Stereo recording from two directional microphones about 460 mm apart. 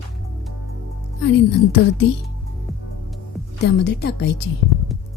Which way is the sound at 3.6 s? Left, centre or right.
Left.